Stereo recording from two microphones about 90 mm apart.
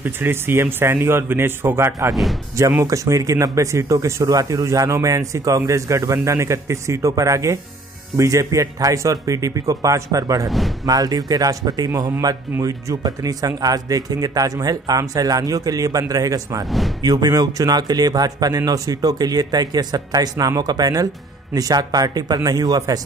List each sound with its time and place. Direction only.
0.0 s speech: 25° right (ahead or behind); by 22.9 s 45° right (ahead or behind)